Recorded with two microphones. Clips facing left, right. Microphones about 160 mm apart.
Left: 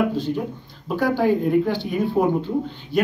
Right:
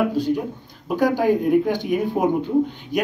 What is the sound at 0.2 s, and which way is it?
Speech, 10° right (ahead or behind).